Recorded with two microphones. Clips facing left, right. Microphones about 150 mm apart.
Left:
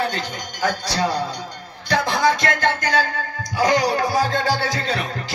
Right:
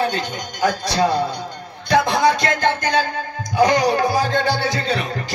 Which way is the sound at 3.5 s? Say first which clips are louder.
Right 3 dB; 15° right (ahead or behind).